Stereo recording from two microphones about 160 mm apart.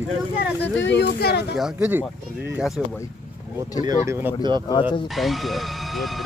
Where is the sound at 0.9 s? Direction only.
90° left.